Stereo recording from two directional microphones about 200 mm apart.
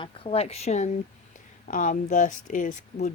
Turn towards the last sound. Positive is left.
turn(degrees=40)  # may be behind; listen again after turning